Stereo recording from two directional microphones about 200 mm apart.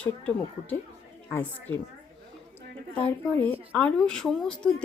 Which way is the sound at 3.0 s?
5° left (ahead or behind).